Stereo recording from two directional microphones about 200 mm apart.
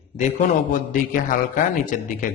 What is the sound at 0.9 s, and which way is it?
A man's voice, 45° left (ahead or behind).